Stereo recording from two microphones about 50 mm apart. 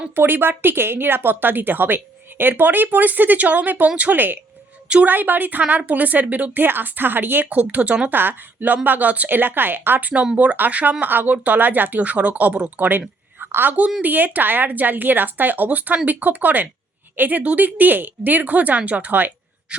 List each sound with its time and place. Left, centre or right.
0.2 s a woman's voice: right
7.5 s a woman's voice: right
8.1 s a woman's voice: right
10.3 s a woman's voice: right
13.4 s a sound: right
14.0 s a woman's voice: right